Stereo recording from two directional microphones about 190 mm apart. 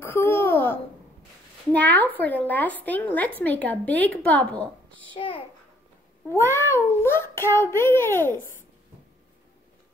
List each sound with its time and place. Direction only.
0.0 s a sound: 10° left (ahead or behind)
1.7 s a child's voice: 10° left (ahead or behind)
5.1 s a child's voice: 25° left (ahead or behind)
6.2 s a child's voice: 15° left (ahead or behind)